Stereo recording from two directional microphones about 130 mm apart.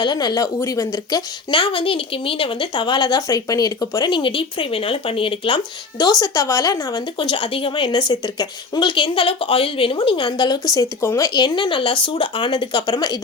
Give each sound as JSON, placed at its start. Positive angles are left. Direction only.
{"t": 0.0, "sound": "speech", "side_deg": 35}
{"t": 0.9, "sound": "speech", "side_deg": 35}
{"t": 7.2, "sound": "speech", "side_deg": 40}
{"t": 10.8, "sound": "speech", "side_deg": 25}
{"t": 11.3, "sound": "speech", "side_deg": 35}